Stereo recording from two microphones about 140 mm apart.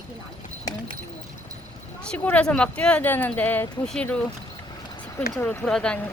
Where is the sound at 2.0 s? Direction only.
5° left (ahead or behind).